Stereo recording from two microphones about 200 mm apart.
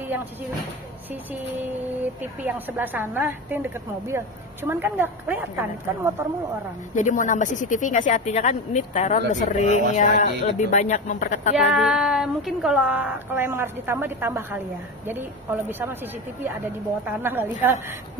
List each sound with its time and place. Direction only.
2.4 s a woman's voice: 10° right (ahead or behind)
7.0 s speech: 40° left (ahead or behind)
11.5 s a woman's voice: centre (ahead or behind)
17.0 s a woman's voice: 10° right (ahead or behind)